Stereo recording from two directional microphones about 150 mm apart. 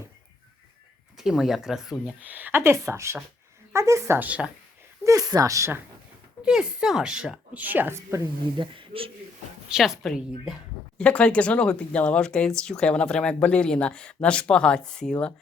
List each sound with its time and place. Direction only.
1.2 s speech: centre (ahead or behind)
5.0 s speech: 20° right (ahead or behind)
6.4 s speech: 5° right (ahead or behind)
8.5 s speech: 35° right (ahead or behind)
9.6 s speech: 5° right (ahead or behind)